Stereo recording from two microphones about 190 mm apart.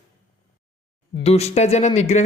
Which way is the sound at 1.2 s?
35° left (ahead or behind).